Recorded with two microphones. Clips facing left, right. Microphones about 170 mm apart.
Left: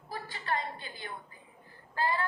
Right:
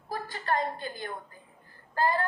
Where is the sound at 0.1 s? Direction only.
45° right (ahead or behind).